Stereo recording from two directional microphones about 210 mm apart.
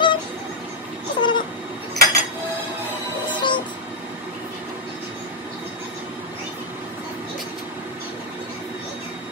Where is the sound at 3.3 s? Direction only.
20° left (ahead or behind).